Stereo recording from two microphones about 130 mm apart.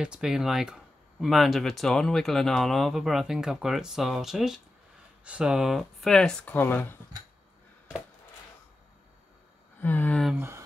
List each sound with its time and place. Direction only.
0.0 s speech: 5° right (ahead or behind); by 7.0 s 15° left (ahead or behind)
9.8 s speech: 15° left (ahead or behind)
10.3 s speech: 20° right (ahead or behind)